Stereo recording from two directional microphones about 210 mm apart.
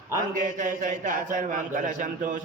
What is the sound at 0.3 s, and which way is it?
A man's voice, 35° right (ahead or behind).